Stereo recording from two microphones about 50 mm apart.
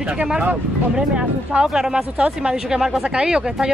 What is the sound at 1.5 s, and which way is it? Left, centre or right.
Speech, centre.